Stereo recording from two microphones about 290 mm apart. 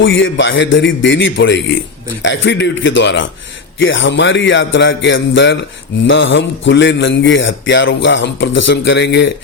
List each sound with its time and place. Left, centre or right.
0.0 s a man's voice: left